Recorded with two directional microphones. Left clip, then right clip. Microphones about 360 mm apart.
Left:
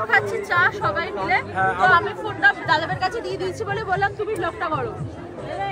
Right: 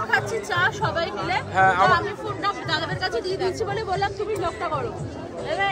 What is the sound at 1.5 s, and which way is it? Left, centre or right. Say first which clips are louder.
Speech: right 3 dB; right.